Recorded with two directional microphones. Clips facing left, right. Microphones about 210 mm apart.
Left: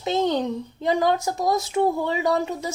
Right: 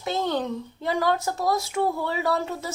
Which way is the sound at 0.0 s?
20° left (ahead or behind).